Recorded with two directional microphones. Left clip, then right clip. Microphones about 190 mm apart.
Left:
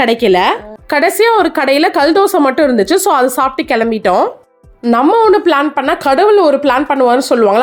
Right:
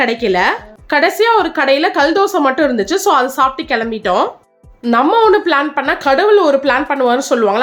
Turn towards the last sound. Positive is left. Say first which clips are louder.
# left 3 dB
turn(degrees=30)  # may be behind; listen again after turning